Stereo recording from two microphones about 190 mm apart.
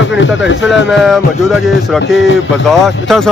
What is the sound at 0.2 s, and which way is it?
Speech, 75° left (ahead or behind).